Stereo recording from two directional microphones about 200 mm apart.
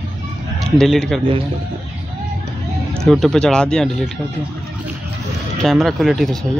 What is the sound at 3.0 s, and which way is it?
Speech, centre (ahead or behind).